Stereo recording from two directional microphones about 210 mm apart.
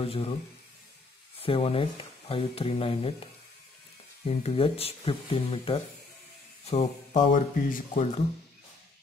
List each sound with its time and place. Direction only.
0.0 s speech: 25° left (ahead or behind)
1.4 s speech: 25° left (ahead or behind)